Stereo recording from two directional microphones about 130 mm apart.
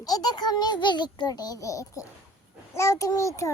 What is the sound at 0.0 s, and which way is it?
A child's voice, 30° left (ahead or behind).